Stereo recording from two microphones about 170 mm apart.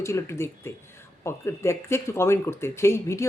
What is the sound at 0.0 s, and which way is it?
Speech, 15° left (ahead or behind).